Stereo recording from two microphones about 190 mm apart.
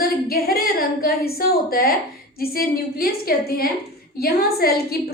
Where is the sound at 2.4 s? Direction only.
50° left (ahead or behind).